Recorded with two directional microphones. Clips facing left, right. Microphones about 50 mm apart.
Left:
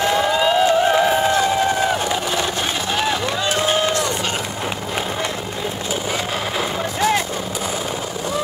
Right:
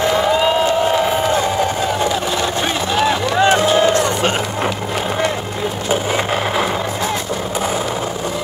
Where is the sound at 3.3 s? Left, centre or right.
Right.